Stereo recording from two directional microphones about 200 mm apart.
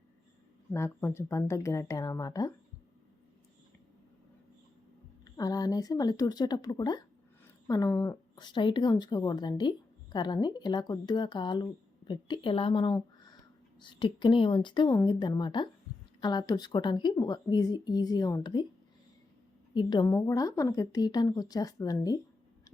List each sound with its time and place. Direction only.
0.7 s a woman's voice: 10° left (ahead or behind)
5.2 s speech: 20° left (ahead or behind)
19.7 s a woman's voice: 25° left (ahead or behind)